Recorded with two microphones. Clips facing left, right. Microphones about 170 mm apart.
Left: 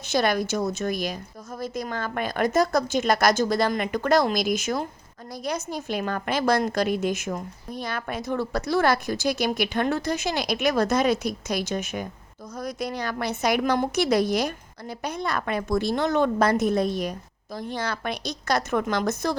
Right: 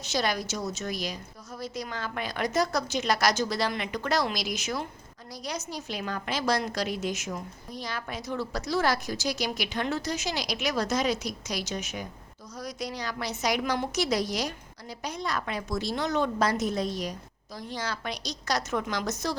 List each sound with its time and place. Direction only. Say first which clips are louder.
0.0 s a woman's voice: left 6 dB; 55° left (ahead or behind)